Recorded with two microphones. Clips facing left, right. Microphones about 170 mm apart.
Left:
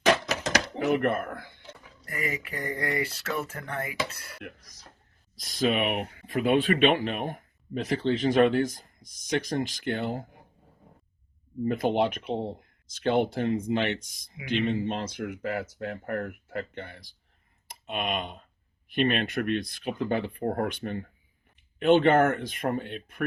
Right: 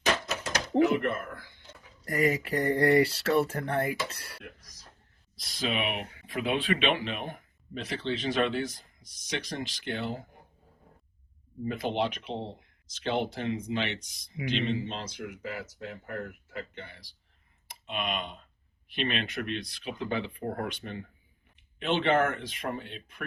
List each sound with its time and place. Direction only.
0.0 s a sound: 90° left
0.9 s speech: 60° left (ahead or behind)
2.0 s speech: 35° right (ahead or behind)
5.4 s speech: 50° left (ahead or behind)
11.7 s speech: 50° left (ahead or behind)